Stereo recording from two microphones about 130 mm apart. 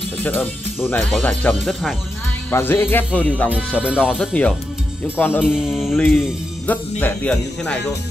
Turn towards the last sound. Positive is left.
turn(degrees=15)  # may be behind; listen again after turning